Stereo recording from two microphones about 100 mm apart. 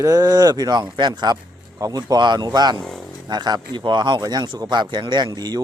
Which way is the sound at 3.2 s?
45° right (ahead or behind).